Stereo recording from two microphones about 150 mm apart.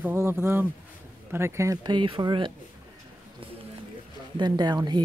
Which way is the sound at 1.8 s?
35° right (ahead or behind).